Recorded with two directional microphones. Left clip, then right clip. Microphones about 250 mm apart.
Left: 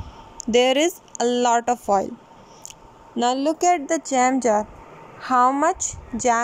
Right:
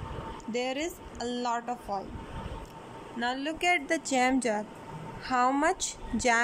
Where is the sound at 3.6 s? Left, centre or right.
Centre.